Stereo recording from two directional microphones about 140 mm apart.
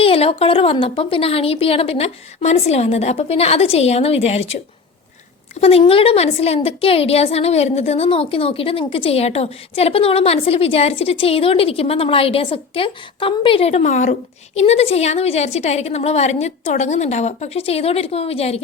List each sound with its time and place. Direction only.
0.0 s a woman's voice: 40° left (ahead or behind)